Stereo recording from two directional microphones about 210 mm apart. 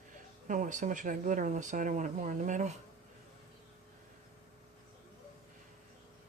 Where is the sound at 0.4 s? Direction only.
40° right (ahead or behind).